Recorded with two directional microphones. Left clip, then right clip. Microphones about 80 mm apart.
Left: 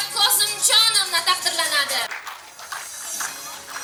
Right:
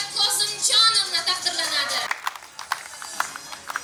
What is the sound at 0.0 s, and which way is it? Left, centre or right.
Music, left.